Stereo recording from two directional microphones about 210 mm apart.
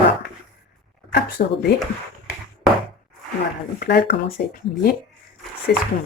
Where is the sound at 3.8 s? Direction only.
50° left (ahead or behind).